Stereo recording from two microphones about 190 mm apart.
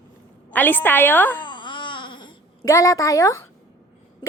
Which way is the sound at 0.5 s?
10° left (ahead or behind).